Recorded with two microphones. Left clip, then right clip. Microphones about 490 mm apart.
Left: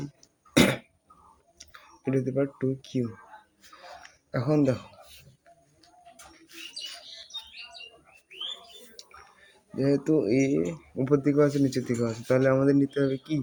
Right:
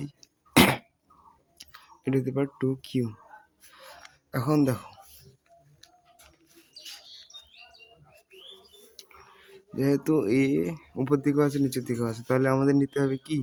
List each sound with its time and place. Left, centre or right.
0.0 s throat clearing: right
2.0 s speech: right
4.3 s speech: right
9.7 s speech: right